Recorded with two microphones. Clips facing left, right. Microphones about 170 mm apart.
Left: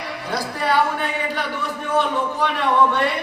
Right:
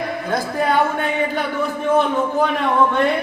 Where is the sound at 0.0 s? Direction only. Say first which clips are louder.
Right 4 dB; 50° right (ahead or behind).